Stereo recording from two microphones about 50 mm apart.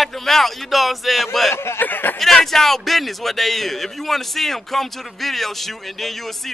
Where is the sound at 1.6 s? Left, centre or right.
Left.